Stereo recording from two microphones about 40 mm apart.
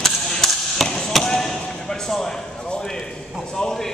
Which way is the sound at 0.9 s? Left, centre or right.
Centre.